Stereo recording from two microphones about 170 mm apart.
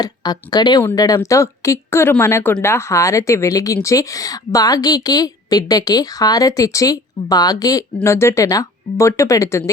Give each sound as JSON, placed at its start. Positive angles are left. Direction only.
{"t": 0.0, "sound": "a woman's voice", "side_deg": 25}